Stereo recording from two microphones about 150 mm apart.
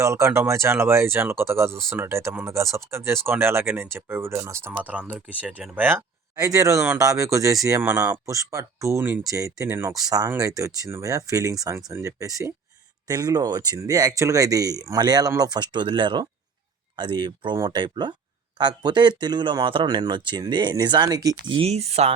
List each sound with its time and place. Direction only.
0.0 s speech: 20° right (ahead or behind)
21.7 s speech: 45° right (ahead or behind)